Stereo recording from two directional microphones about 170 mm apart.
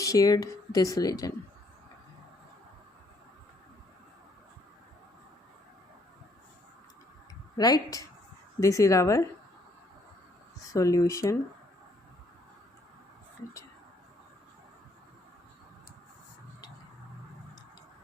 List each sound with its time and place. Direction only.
0.0 s speech: 20° left (ahead or behind)
7.5 s speech: 25° left (ahead or behind)
10.7 s speech: 20° left (ahead or behind)